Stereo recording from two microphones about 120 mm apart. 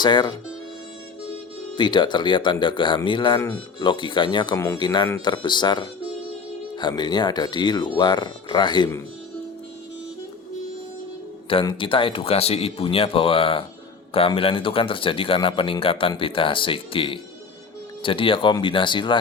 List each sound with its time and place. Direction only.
0.0 s speech: 35° left (ahead or behind)
1.7 s speech: 40° left (ahead or behind)
4.5 s speech: 25° left (ahead or behind)
4.8 s speech: 40° left (ahead or behind)
11.6 s a man's voice: 45° left (ahead or behind)